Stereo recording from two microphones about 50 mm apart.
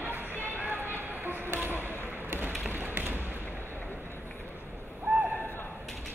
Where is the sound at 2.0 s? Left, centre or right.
Right.